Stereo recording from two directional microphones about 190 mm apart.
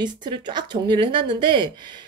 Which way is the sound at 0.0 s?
25° right (ahead or behind).